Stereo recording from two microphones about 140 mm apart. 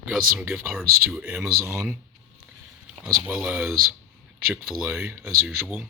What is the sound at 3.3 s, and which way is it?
Speech, 10° right (ahead or behind).